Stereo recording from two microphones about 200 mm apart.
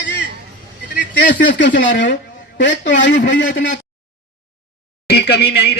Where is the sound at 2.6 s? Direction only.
65° left (ahead or behind).